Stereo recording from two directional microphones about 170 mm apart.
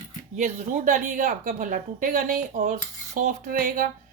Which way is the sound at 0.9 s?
45° right (ahead or behind).